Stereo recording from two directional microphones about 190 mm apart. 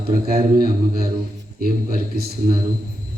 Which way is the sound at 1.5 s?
50° right (ahead or behind).